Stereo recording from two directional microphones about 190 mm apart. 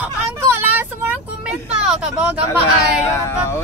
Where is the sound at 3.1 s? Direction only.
15° left (ahead or behind).